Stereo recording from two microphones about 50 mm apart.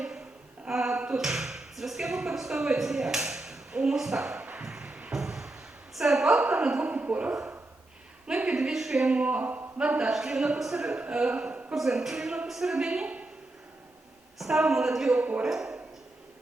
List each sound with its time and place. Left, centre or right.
0.7 s a sound: centre
4.4 s a sound: right
4.7 s music: centre
5.1 s a sound: centre
6.0 s a woman's voice: centre; by 7.3 s right
8.5 s a woman's voice: centre
9.1 s a man's voice: right
10.1 s a woman's voice: centre
11.7 s a woman's voice: centre
14.3 s a woman's voice: centre
15.2 s a man's voice: right
15.4 s a sound: centre